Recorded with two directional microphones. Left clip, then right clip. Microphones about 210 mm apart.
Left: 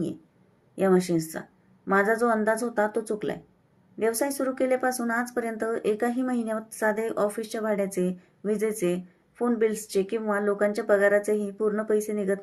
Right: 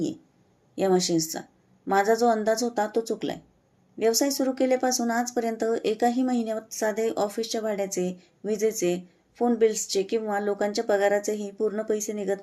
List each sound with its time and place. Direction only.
0.8 s speech: 50° right (ahead or behind)